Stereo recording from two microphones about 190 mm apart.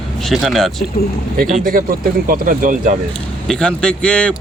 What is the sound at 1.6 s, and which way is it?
Speech, 50° right (ahead or behind).